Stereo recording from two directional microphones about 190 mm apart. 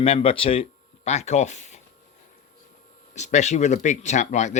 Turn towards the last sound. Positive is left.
turn(degrees=40)  # may be behind; listen again after turning